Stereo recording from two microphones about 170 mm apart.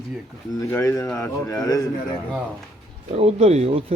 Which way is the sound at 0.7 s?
15° left (ahead or behind).